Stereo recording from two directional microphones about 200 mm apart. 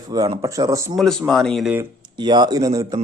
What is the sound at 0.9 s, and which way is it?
Speech, centre (ahead or behind).